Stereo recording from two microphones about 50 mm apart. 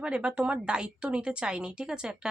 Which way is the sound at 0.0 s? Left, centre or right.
Right.